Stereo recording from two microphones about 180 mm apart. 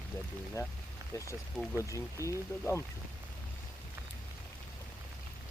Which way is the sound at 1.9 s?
15° left (ahead or behind).